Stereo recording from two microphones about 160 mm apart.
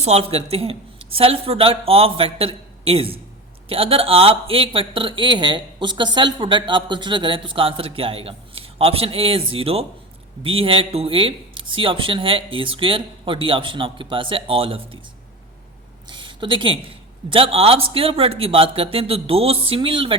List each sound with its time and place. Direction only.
0.0 s speech: 40° right (ahead or behind)
16.0 s a sound: 30° right (ahead or behind)
17.2 s speech: 35° right (ahead or behind)